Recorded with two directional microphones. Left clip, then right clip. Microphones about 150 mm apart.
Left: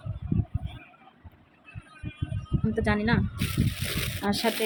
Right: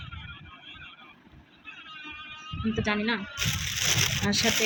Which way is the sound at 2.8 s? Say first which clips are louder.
Left 2 dB; 20° left (ahead or behind).